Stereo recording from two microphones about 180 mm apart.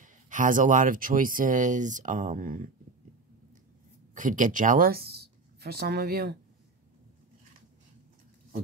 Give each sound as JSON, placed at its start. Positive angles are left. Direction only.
{"t": 0.0, "sound": "speech", "side_deg": -45}
{"t": 4.1, "sound": "speech", "side_deg": -45}